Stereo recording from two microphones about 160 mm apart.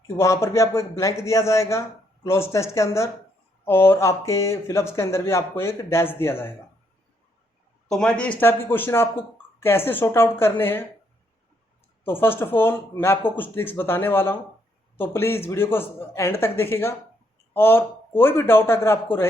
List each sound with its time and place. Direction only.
0.2 s speech: 15° left (ahead or behind)
7.9 s speech: 5° left (ahead or behind)
12.0 s speech: 15° left (ahead or behind)